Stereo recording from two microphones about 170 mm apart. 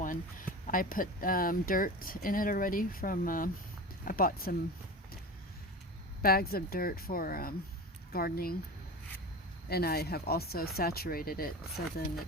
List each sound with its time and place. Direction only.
0.0 s speech: 55° left (ahead or behind)
6.2 s speech: 60° left (ahead or behind)
9.6 s speech: 65° left (ahead or behind)
11.8 s speech: 70° left (ahead or behind)